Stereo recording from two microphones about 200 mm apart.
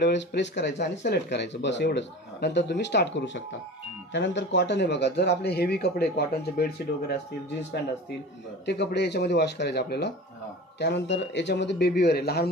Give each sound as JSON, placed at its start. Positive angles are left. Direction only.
{"t": 0.0, "sound": "speech", "side_deg": 60}
{"t": 8.6, "sound": "speech", "side_deg": 55}